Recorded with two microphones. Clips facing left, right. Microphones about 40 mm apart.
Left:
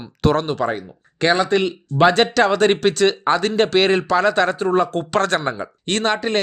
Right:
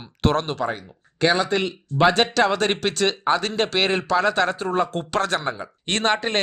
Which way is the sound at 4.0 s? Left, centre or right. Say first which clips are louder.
Left 3 dB; left.